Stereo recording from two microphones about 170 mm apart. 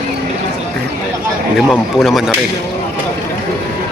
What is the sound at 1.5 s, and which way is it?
Speech, centre (ahead or behind).